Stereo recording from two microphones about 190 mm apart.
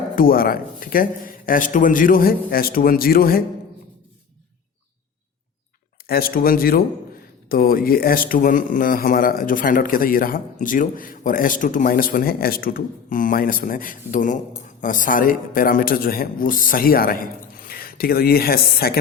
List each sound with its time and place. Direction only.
0.2 s speech: 50° left (ahead or behind)
6.1 s speech: 50° left (ahead or behind)